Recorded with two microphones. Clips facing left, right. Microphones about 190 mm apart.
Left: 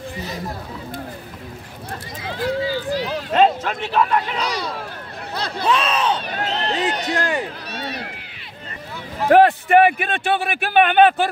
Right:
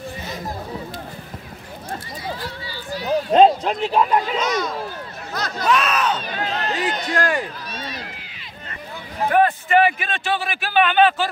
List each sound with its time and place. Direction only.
2.4 s a sound: 90° left
3.3 s a sound: 35° right (ahead or behind)
3.8 s speech: 15° right (ahead or behind)
4.4 s speech: 35° left (ahead or behind)
7.7 s run: 65° left (ahead or behind)
9.3 s a man's voice: 65° left (ahead or behind)